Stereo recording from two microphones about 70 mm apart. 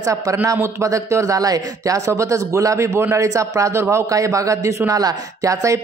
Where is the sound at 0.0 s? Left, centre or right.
Right.